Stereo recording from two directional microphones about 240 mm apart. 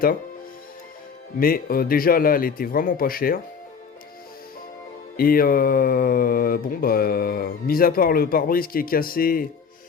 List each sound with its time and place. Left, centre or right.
1.4 s mantra: left
5.1 s mantra: left